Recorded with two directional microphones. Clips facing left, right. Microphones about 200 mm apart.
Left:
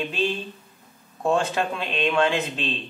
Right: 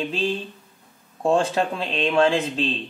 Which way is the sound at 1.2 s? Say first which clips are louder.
Right 3 dB; 30° right (ahead or behind).